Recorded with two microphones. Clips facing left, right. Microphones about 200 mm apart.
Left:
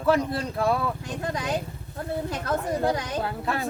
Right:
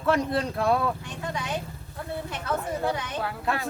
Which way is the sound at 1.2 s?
35° left (ahead or behind).